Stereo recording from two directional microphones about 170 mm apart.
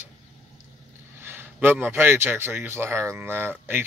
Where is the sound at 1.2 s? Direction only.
10° right (ahead or behind).